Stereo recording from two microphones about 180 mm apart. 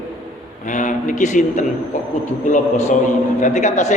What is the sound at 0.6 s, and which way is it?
A man's voice, 45° left (ahead or behind).